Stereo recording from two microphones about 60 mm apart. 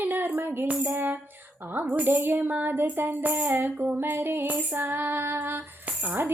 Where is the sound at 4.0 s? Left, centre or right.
Right.